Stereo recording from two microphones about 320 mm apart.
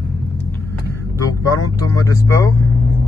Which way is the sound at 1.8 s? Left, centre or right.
Centre.